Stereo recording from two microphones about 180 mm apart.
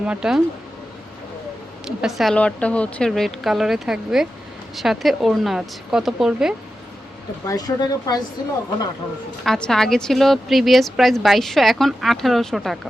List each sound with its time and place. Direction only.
0.0 s a woman's voice: 5° right (ahead or behind)
1.8 s a woman's voice: 5° right (ahead or behind)
7.4 s speech: 20° left (ahead or behind)
9.4 s a woman's voice: 5° left (ahead or behind)